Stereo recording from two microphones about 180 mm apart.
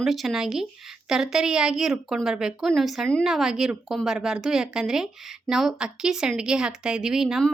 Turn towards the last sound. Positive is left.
turn(degrees=0)  # may be behind; listen again after turning